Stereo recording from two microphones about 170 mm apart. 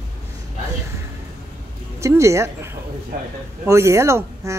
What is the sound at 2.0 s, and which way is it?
Speech, 15° right (ahead or behind).